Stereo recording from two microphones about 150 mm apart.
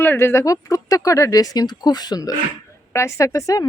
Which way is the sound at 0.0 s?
15° left (ahead or behind).